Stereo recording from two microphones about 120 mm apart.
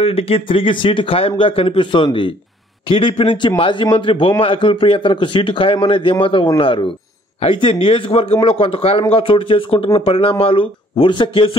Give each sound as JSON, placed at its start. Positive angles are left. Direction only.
{"t": 0.0, "sound": "a man's voice", "side_deg": 55}